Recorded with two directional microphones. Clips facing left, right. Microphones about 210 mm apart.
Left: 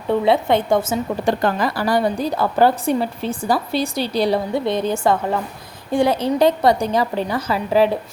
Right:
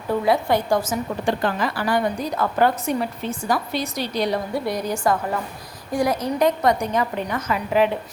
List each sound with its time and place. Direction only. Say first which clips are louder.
0.1 s a woman's voice: left 3 dB; 25° left (ahead or behind)
1.2 s a woman's voice: left 3 dB; 40° left (ahead or behind)